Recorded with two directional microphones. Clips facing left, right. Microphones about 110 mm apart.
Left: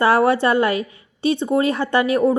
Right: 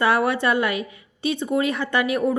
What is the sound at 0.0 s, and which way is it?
A woman's voice, 35° left (ahead or behind).